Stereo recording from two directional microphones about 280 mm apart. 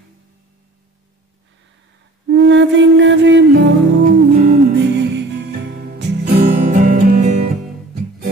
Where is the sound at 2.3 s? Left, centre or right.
Right.